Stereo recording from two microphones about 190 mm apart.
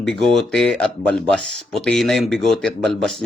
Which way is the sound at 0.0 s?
Centre (ahead or behind).